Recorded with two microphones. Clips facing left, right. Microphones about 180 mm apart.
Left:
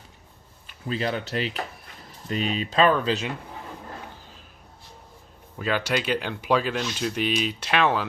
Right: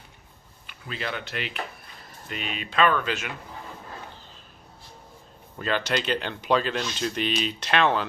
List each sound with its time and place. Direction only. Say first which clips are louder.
0.7 s speech: left 6 dB; 35° left (ahead or behind)
5.5 s speech: left 1 dB; 5° left (ahead or behind)